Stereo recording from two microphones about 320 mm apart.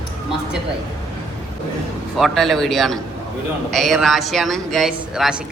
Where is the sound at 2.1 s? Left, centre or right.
Centre.